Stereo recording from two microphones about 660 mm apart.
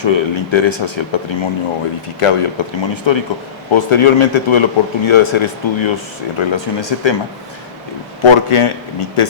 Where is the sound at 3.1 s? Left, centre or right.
Left.